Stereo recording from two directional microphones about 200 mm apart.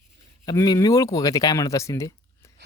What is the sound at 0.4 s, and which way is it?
Speech, 20° left (ahead or behind).